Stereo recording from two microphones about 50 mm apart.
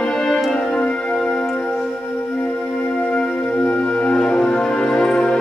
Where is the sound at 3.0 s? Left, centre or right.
Left.